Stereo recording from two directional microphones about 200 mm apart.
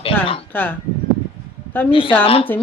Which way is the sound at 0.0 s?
30° left (ahead or behind).